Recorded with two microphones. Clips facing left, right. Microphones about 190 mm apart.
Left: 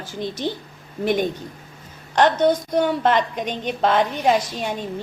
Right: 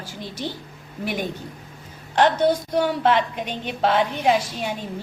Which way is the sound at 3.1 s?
45° left (ahead or behind).